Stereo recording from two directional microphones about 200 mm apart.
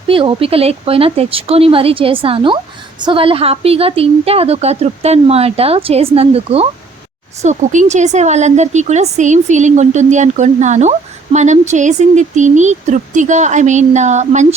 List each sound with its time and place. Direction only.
0.1 s a woman's voice: 25° right (ahead or behind)